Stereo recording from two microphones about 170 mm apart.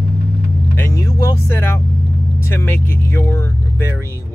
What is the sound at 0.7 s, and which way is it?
Speech, 15° left (ahead or behind).